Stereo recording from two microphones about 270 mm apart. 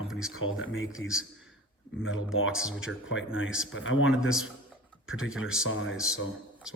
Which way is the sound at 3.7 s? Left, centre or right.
Left.